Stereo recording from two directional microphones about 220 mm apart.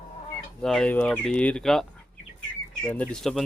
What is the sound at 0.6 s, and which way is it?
Speech, centre (ahead or behind).